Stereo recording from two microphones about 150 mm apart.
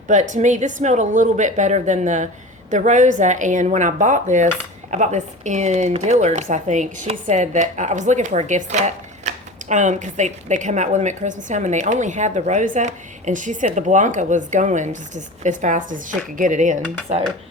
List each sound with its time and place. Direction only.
0.1 s speech: 55° right (ahead or behind)